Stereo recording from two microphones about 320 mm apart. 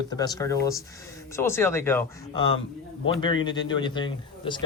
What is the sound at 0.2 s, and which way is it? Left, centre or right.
Speech, centre.